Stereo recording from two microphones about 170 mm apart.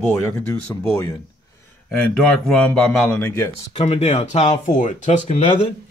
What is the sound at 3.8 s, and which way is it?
Speech, 40° left (ahead or behind).